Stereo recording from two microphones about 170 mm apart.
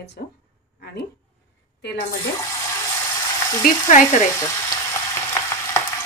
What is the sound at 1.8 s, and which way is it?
Speech, 85° left.